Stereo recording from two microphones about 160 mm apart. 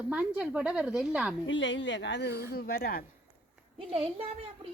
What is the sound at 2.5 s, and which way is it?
Speech, 70° left (ahead or behind).